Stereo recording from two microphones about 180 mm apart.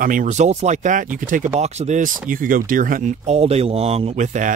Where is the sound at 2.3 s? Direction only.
50° right (ahead or behind).